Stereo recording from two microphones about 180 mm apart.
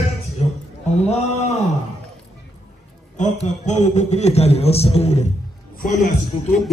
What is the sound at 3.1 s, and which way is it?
A man's voice, 40° left (ahead or behind).